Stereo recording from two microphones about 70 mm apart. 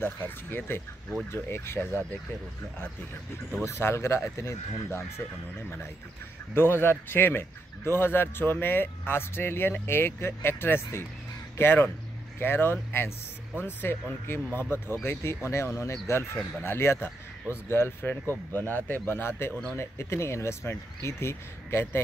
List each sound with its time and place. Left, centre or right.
0.0 s speech: left
3.5 s speech: left
6.5 s a man's voice: left